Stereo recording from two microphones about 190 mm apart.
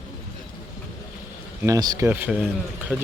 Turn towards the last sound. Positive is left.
turn(degrees=-10)  # may be behind; listen again after turning